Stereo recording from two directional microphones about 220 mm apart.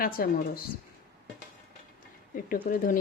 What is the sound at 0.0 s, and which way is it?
Speech, 40° left (ahead or behind).